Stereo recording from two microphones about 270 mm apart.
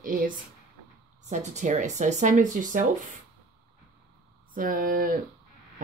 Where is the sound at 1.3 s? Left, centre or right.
Right.